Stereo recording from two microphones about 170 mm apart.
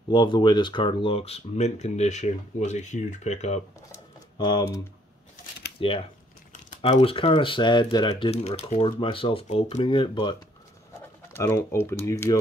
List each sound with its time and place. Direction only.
0.1 s speech: 25° left (ahead or behind)
4.4 s speech: 25° left (ahead or behind)
11.3 s speech: 15° left (ahead or behind)